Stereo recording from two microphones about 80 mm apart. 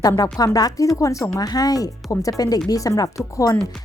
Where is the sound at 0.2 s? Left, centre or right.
Left.